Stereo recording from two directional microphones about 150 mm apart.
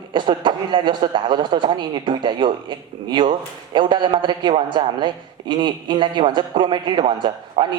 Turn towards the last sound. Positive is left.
turn(degrees=-30)  # may be behind; listen again after turning